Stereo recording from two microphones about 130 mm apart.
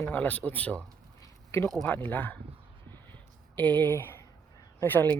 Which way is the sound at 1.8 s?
15° left (ahead or behind).